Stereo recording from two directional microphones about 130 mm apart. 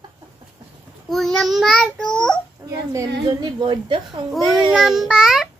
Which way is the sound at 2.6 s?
30° right (ahead or behind).